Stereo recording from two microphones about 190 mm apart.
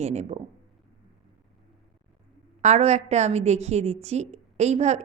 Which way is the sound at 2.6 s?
35° right (ahead or behind).